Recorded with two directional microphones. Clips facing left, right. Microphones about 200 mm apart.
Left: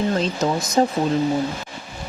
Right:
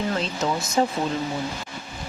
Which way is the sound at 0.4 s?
45° left (ahead or behind).